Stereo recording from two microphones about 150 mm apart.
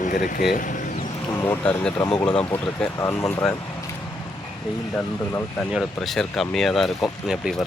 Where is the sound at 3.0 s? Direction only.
20° left (ahead or behind).